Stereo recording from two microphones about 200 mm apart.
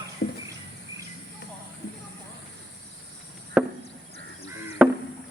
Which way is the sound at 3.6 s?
5° right (ahead or behind).